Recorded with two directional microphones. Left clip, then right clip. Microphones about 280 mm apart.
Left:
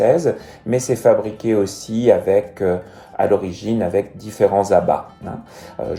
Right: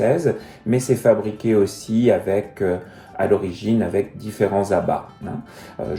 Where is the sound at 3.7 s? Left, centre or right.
Centre.